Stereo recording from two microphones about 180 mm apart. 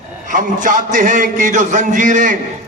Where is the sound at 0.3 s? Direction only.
45° right (ahead or behind).